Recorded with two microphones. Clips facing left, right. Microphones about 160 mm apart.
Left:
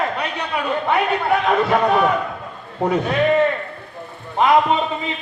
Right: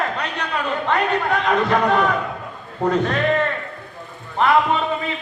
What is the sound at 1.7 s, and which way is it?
A man's voice, 10° left (ahead or behind).